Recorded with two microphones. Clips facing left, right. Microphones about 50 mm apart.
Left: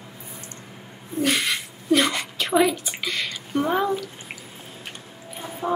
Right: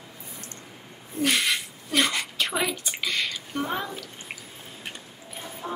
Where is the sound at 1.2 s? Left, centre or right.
Centre.